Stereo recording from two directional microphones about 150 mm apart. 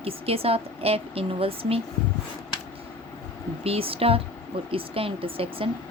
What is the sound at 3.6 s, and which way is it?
Speech, 40° right (ahead or behind).